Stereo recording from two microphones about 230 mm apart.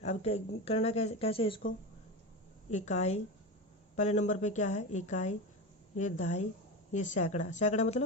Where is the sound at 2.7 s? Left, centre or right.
Left.